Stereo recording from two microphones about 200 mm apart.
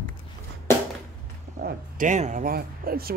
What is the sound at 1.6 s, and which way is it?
Speech, 45° right (ahead or behind).